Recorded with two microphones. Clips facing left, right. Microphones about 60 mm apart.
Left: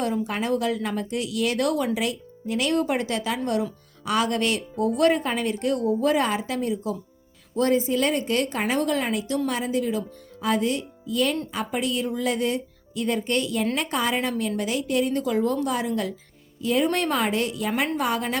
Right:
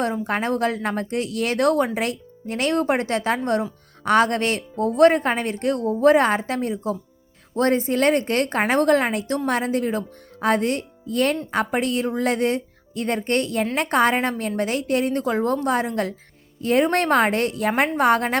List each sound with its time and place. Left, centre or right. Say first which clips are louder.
0.0 s a woman's voice: right 3 dB; right